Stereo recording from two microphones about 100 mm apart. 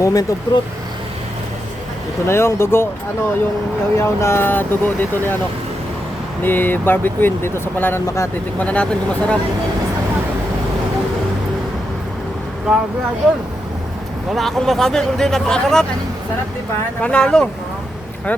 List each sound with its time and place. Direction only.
0.0 s speech: 35° left (ahead or behind)
2.2 s speech: 25° left (ahead or behind)
3.9 s speech: 25° left (ahead or behind)
6.4 s speech: 20° left (ahead or behind)
8.5 s speech: 15° left (ahead or behind)
12.7 s speech: 5° right (ahead or behind)
14.3 s speech: centre (ahead or behind)
17.0 s speech: 10° left (ahead or behind)